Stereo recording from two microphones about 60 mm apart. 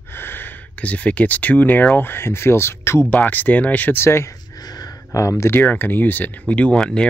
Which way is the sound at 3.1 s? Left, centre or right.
Left.